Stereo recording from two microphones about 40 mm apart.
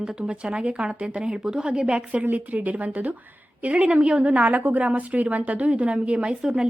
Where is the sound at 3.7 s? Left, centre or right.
Right.